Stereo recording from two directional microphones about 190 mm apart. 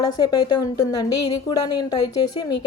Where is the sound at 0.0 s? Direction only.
20° left (ahead or behind).